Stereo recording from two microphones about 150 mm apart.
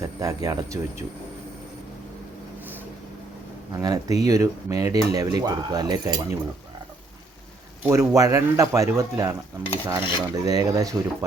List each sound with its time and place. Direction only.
0.0 s speech: 25° right (ahead or behind)
3.8 s speech: 25° right (ahead or behind)
7.9 s speech: 20° right (ahead or behind)